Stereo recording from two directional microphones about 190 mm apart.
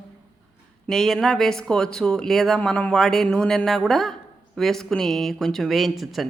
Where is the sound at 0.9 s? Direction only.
Centre (ahead or behind).